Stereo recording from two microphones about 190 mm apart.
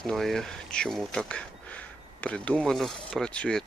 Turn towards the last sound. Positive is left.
turn(degrees=5)  # may be behind; listen again after turning